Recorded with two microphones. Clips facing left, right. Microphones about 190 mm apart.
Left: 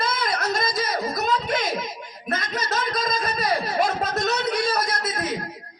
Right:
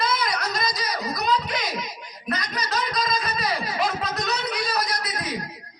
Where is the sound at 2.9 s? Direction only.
50° left (ahead or behind).